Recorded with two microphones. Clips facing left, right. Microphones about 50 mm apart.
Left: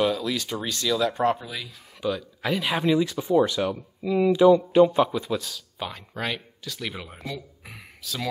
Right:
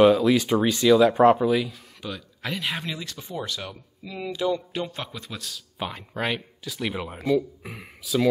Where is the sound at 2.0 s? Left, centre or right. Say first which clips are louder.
Left 7 dB; centre.